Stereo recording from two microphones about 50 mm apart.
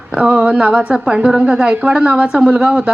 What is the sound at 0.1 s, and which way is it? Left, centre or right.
A woman's voice, right.